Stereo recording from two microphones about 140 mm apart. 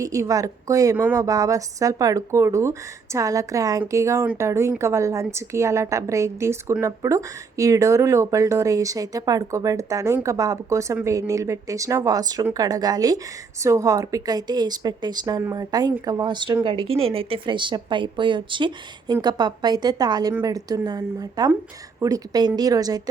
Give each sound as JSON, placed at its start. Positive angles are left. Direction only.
{"t": 0.0, "sound": "speech", "side_deg": -25}
{"t": 0.9, "sound": "speech", "side_deg": -10}
{"t": 1.2, "sound": "a woman's voice", "side_deg": -25}